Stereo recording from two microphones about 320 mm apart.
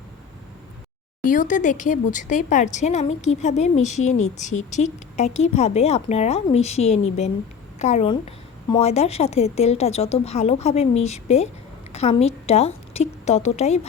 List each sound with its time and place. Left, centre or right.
1.2 s a woman's voice: left